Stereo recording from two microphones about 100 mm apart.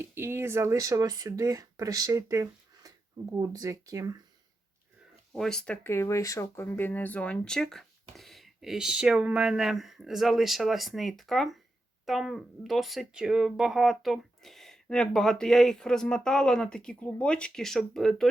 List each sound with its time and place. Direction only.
0.0 s speech: 25° right (ahead or behind)
5.3 s speech: 5° left (ahead or behind)
5.8 s speech: 25° left (ahead or behind)
6.7 s speech: 20° left (ahead or behind); by 18.3 s 5° left (ahead or behind)